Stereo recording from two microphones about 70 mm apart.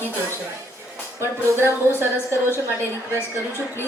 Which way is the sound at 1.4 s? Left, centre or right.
Left.